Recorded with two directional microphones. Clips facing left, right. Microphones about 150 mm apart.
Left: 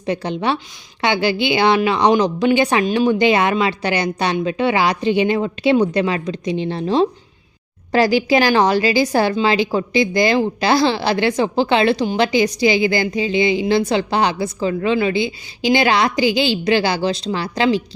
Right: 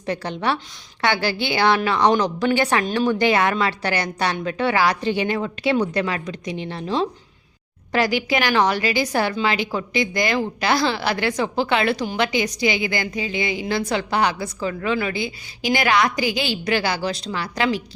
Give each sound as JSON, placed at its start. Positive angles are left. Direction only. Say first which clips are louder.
{"t": 0.0, "sound": "a woman's voice", "louder": "left 4 dB", "side_deg": 20}